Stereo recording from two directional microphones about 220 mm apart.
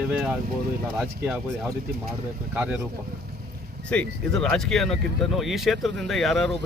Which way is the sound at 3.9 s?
Centre (ahead or behind).